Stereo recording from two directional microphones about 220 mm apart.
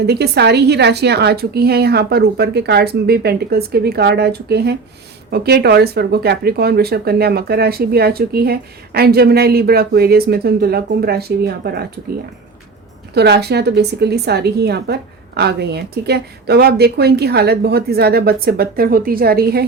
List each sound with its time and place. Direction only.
0.0 s speech: 50° right (ahead or behind)
13.1 s speech: 50° right (ahead or behind)